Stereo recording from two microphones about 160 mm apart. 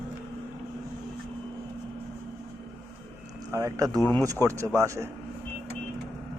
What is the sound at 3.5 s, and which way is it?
Speech, 20° right (ahead or behind).